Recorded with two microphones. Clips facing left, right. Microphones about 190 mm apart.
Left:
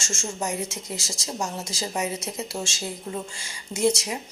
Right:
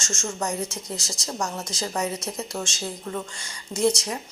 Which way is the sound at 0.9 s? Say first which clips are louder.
Left 1 dB; 25° left (ahead or behind).